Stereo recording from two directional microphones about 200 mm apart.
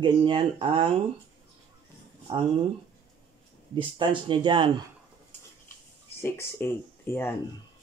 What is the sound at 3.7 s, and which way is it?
Speech, 25° right (ahead or behind).